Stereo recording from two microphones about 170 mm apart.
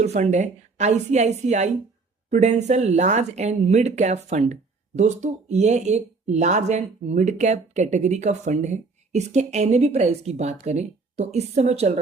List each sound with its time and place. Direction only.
0.0 s speech: 40° right (ahead or behind)